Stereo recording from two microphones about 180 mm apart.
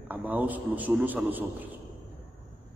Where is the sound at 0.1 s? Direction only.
10° right (ahead or behind).